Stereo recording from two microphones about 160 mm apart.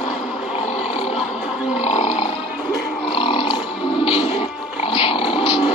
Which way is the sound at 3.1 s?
35° left (ahead or behind).